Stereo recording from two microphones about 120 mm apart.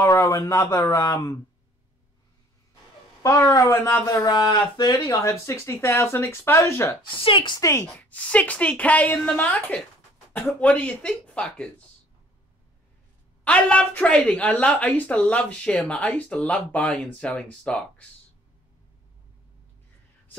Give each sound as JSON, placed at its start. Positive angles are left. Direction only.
{"t": 0.0, "sound": "speech", "side_deg": 25}
{"t": 3.2, "sound": "speech", "side_deg": 25}
{"t": 7.0, "sound": "speech", "side_deg": 45}
{"t": 7.6, "sound": "speech", "side_deg": 20}
{"t": 8.0, "sound": "a woman's voice", "side_deg": 10}
{"t": 13.4, "sound": "a woman's voice", "side_deg": 10}